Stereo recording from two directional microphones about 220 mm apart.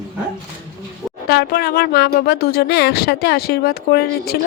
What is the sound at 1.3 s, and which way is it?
Speech, 45° left (ahead or behind).